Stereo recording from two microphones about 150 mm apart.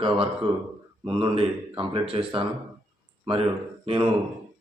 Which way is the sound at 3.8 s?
35° right (ahead or behind).